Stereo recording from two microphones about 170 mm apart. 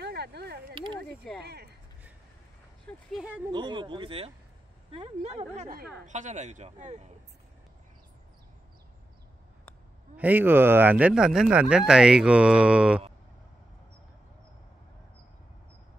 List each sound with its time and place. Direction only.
0.0 s a sound: 75° right (ahead or behind)
1.4 s speech: 70° right (ahead or behind)
3.1 s speech: 5° right (ahead or behind)
3.5 s speech: 25° right (ahead or behind); by 7.1 s 45° right (ahead or behind)
10.1 s speech: 10° right (ahead or behind)